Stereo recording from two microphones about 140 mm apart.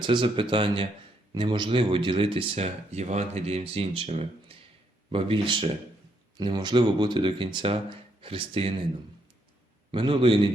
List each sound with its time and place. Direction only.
0.0 s speech: 35° right (ahead or behind)
9.9 s speech: 40° right (ahead or behind)